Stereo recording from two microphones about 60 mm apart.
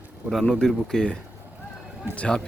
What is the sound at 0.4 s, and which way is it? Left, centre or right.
Speech, centre.